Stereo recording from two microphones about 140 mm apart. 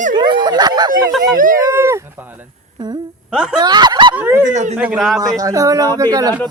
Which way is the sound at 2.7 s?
30° right (ahead or behind).